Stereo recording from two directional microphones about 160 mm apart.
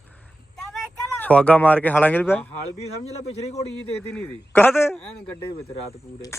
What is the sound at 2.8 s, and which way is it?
Speech, 40° left (ahead or behind).